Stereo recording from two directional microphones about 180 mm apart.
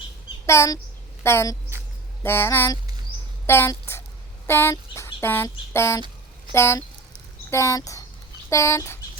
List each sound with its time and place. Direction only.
0.4 s speech: 15° left (ahead or behind)
4.4 s a sound: 15° left (ahead or behind)
6.5 s speech: 15° left (ahead or behind)